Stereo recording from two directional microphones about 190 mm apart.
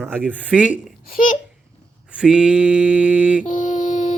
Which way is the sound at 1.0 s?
45° left (ahead or behind).